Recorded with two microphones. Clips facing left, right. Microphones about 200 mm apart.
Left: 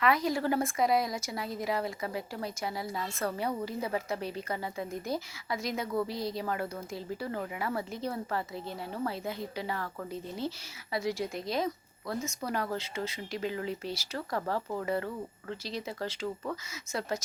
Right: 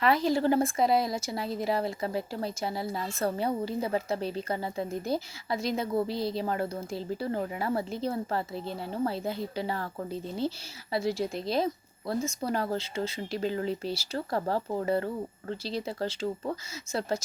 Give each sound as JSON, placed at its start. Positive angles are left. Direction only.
{"t": 0.0, "sound": "a woman's voice", "side_deg": -30}